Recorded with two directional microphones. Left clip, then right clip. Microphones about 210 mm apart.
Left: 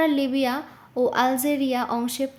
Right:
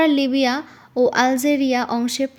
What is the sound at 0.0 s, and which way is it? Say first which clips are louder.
Speech: right 5 dB; 30° right (ahead or behind).